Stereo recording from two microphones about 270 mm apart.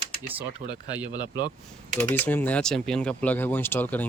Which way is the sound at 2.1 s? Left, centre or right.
Centre.